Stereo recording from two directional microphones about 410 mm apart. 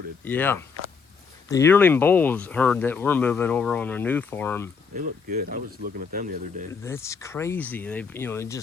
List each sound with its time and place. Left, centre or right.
0.3 s speech: centre
4.9 s speech: right
6.8 s speech: centre